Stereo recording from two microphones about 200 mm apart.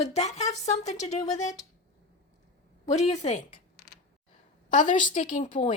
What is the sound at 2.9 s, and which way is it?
Speech, 35° left (ahead or behind).